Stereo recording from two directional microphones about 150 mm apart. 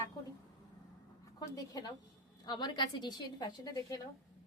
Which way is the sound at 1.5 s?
25° left (ahead or behind).